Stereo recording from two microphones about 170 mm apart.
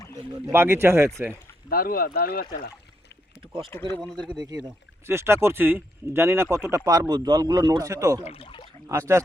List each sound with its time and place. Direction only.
0.4 s speech: 15° right (ahead or behind)
1.7 s speech: 60° left (ahead or behind)
3.4 s speech: 30° right (ahead or behind)
3.7 s speech: 10° left (ahead or behind)
4.2 s speech: 25° right (ahead or behind)
8.2 s speech: 35° left (ahead or behind)
8.9 s speech: 15° right (ahead or behind)